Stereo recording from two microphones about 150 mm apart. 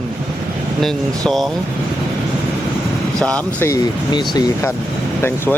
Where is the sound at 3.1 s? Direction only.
5° left (ahead or behind).